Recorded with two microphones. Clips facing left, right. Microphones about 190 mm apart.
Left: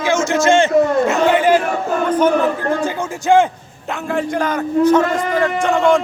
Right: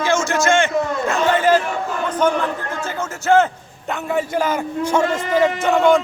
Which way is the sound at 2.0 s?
10° left (ahead or behind).